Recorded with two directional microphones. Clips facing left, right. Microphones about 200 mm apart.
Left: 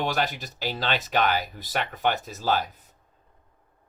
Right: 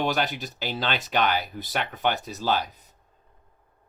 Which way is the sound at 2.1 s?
45° left (ahead or behind).